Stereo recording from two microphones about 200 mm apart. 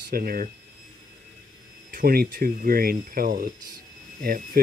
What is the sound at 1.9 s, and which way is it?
Speech, 45° right (ahead or behind).